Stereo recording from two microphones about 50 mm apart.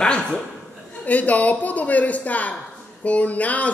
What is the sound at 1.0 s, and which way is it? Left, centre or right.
A woman's voice, left.